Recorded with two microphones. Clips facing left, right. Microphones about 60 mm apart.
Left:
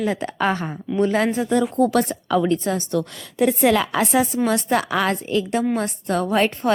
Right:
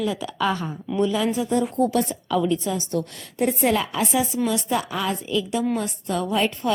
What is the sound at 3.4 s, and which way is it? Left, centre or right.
A woman's voice, left.